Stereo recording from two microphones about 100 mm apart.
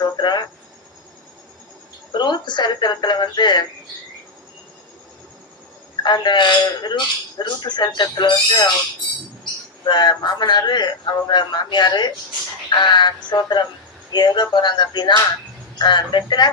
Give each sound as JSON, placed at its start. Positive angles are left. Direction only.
{"t": 0.0, "sound": "cricket", "side_deg": 45}
{"t": 2.1, "sound": "a man's voice", "side_deg": 50}
{"t": 6.0, "sound": "a man's voice", "side_deg": 45}